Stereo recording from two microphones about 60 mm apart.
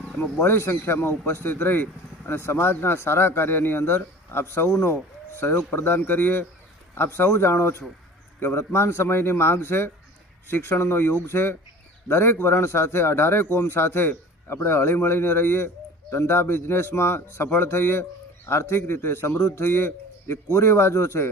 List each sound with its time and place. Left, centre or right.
0.3 s speech: left
4.7 s a man's voice: left
19.4 s a man's voice: left
19.6 s a man's voice: left